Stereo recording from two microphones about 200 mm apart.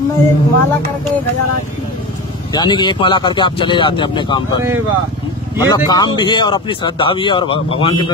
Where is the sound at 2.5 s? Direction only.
20° left (ahead or behind).